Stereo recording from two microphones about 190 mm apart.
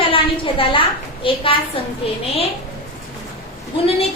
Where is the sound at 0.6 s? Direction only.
25° left (ahead or behind).